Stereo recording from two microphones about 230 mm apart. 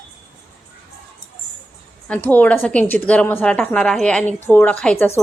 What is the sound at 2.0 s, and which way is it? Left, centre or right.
A woman's voice, centre.